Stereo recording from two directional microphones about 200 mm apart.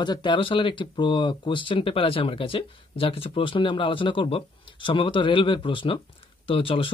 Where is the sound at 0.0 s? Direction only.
20° left (ahead or behind).